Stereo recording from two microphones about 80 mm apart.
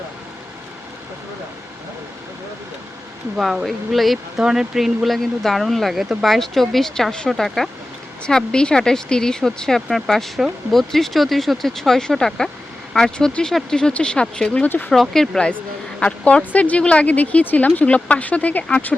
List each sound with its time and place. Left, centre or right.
3.3 s speech: centre
15.1 s speech: centre; by 18.9 s left